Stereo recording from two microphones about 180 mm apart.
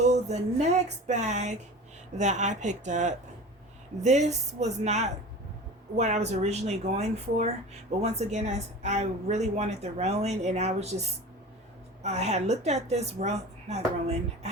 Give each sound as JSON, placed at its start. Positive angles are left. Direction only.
{"t": 0.0, "sound": "a woman's voice", "side_deg": -40}
{"t": 12.0, "sound": "speech", "side_deg": -35}